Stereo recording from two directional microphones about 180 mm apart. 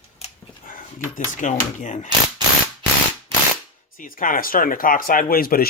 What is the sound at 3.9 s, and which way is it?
Speech, 50° left (ahead or behind).